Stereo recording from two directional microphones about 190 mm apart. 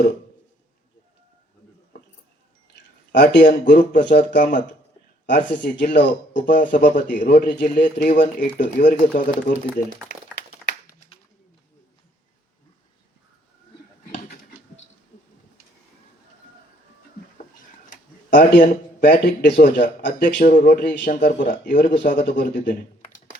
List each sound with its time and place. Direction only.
3.1 s speech: 65° left (ahead or behind)
3.4 s speech: 45° left (ahead or behind)
5.7 s speech: 60° left (ahead or behind)
7.3 s speech: 55° left (ahead or behind)
18.3 s speech: 45° left (ahead or behind)